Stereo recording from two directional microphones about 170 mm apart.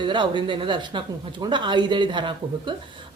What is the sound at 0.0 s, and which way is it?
A woman's voice, 25° right (ahead or behind).